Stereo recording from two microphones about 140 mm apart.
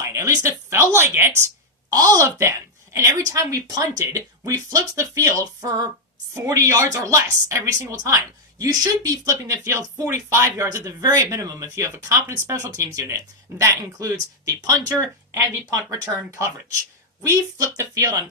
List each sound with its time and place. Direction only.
0.0 s a woman's voice: 20° right (ahead or behind)
17.2 s speech: 20° right (ahead or behind)